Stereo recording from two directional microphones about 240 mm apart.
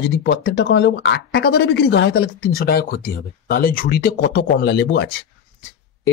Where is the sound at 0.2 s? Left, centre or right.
Left.